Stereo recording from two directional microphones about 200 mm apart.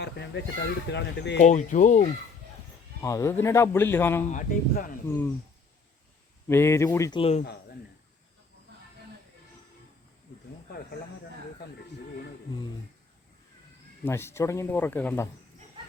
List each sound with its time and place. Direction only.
0.0 s a sound: 60° left (ahead or behind)
0.9 s speech: 60° left (ahead or behind)
1.5 s speech: 35° left (ahead or behind)
3.0 s speech: 15° left (ahead or behind)
4.3 s speech: 40° left (ahead or behind)
5.0 s speech: 10° left (ahead or behind)
6.5 s speech: 15° left (ahead or behind)
7.2 s speech: 30° left (ahead or behind)
14.0 s speech: 10° left (ahead or behind)